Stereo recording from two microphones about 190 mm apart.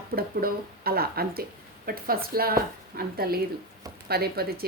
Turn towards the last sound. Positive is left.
turn(degrees=-55)  # may be behind; listen again after turning